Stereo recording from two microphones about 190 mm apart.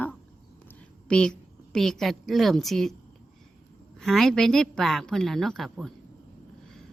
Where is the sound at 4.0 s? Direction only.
5° left (ahead or behind).